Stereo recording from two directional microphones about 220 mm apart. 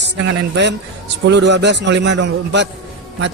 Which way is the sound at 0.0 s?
50° right (ahead or behind).